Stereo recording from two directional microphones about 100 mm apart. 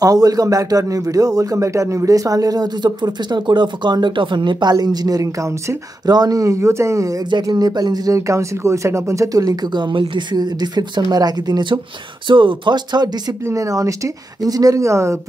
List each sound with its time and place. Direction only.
0.0 s a man's voice: 35° right (ahead or behind)
7.2 s a man's voice: 45° right (ahead or behind)
13.4 s a man's voice: 30° right (ahead or behind)